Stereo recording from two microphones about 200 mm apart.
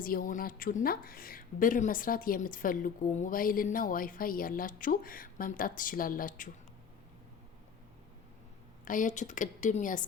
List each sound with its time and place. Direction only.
0.0 s a woman's voice: 45° left (ahead or behind)
8.8 s a woman's voice: 40° left (ahead or behind)